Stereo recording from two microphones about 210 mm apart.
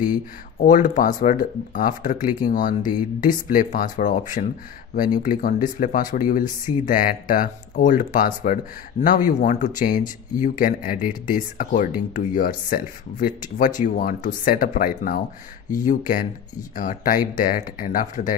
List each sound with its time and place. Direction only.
0.6 s speech: 40° left (ahead or behind)